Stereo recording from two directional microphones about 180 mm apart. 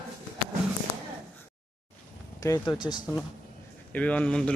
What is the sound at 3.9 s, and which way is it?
Speech, 10° left (ahead or behind).